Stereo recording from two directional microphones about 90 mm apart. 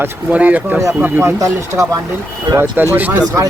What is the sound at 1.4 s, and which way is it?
Speech, 40° right (ahead or behind).